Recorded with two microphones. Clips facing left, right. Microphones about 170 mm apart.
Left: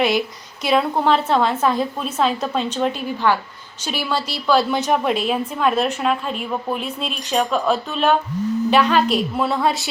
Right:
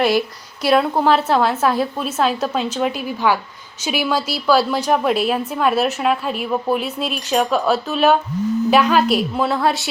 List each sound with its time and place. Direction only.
0.6 s a woman's voice: 5° right (ahead or behind)